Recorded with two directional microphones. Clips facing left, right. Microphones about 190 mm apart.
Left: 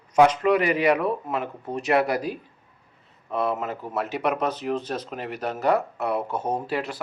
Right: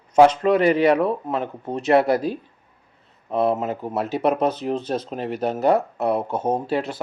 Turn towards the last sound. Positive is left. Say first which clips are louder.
# right 4 dB
turn(degrees=-25)  # may be behind; listen again after turning